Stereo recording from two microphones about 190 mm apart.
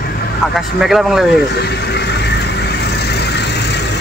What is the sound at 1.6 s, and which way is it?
Vehicle, 60° left (ahead or behind).